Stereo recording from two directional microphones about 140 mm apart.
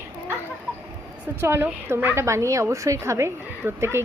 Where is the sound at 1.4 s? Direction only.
15° right (ahead or behind).